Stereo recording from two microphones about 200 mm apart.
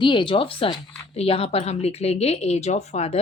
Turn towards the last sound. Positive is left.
turn(degrees=30)  # may be behind; listen again after turning